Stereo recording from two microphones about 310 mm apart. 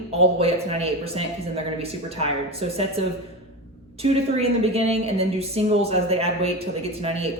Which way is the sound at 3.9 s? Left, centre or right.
Centre.